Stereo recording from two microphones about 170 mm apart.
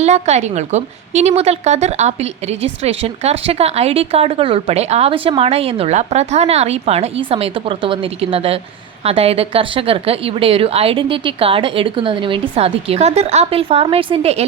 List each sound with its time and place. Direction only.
0.0 s a woman's voice: 40° right (ahead or behind)